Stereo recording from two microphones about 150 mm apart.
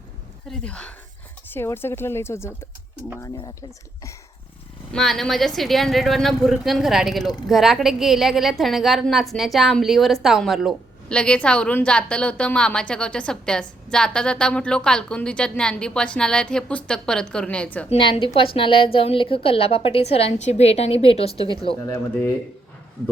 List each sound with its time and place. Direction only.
0.4 s speech: 5° left (ahead or behind)
4.9 s a woman's voice: 5° left (ahead or behind)
17.8 s a woman's voice: 40° left (ahead or behind)
21.8 s speech: 15° left (ahead or behind)